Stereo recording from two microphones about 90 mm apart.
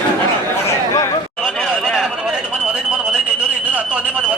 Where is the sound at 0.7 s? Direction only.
35° left (ahead or behind).